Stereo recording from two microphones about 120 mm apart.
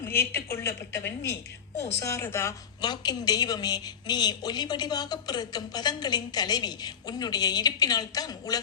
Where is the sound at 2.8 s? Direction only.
35° left (ahead or behind).